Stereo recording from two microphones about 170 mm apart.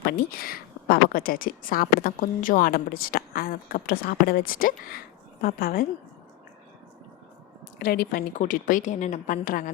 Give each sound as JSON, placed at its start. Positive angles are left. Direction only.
{"t": 0.0, "sound": "a woman's voice", "side_deg": 60}
{"t": 7.8, "sound": "a woman's voice", "side_deg": 60}
{"t": 8.3, "sound": "speech", "side_deg": 45}